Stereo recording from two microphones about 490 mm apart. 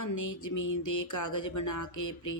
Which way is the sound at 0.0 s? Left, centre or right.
Left.